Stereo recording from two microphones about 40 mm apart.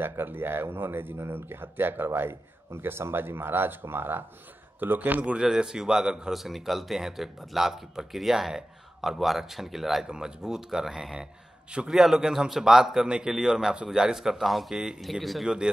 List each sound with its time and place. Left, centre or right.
0.0 s speech: right
4.7 s a man's voice: right
5.4 s speech: centre
6.3 s speech: centre
10.0 s speech: centre
15.4 s speech: centre